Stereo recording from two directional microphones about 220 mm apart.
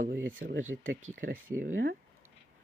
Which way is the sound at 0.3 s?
40° right (ahead or behind).